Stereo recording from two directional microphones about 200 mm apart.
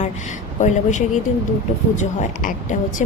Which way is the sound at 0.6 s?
35° left (ahead or behind).